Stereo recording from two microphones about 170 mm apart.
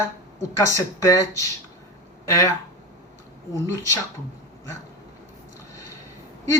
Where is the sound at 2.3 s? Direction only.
15° left (ahead or behind).